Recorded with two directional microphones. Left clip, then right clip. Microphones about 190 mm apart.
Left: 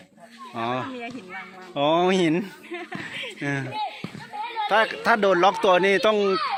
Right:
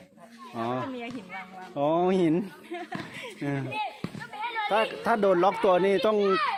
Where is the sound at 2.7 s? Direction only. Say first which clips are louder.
Left 4 dB; 70° right (ahead or behind).